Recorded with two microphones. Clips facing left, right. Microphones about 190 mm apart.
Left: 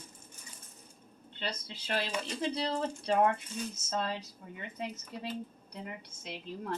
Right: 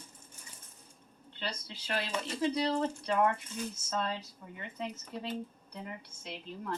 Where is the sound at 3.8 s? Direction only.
25° left (ahead or behind).